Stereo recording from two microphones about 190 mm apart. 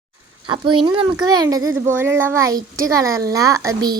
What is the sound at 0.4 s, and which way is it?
Speech, 25° right (ahead or behind).